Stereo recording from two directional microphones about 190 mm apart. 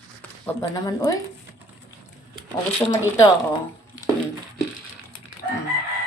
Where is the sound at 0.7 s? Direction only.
20° left (ahead or behind).